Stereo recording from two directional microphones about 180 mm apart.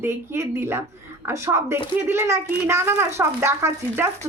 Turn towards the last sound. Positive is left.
turn(degrees=-15)  # may be behind; listen again after turning